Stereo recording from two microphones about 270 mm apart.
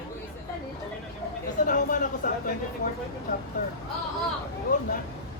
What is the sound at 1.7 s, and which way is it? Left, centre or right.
Speech, left.